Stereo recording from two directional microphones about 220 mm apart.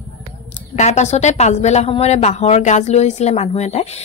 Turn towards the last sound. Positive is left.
turn(degrees=30)  # may be behind; listen again after turning